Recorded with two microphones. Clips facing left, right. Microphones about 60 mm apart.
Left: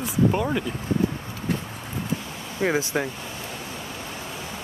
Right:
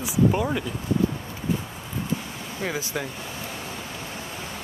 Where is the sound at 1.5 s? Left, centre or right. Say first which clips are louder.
Even; left.